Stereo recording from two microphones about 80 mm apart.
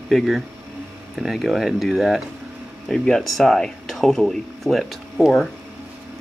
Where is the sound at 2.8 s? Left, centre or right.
Centre.